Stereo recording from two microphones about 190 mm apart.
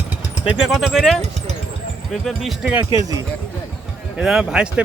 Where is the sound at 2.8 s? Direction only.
20° right (ahead or behind).